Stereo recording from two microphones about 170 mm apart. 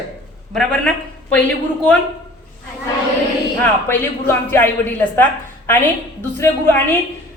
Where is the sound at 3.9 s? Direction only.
10° left (ahead or behind).